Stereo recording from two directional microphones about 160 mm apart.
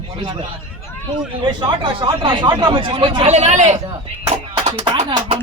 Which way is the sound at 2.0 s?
30° right (ahead or behind).